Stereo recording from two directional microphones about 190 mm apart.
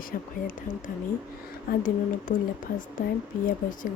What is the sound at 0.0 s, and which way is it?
Speech, 45° left (ahead or behind).